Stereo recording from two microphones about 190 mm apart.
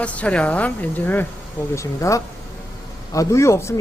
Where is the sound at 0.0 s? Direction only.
5° left (ahead or behind).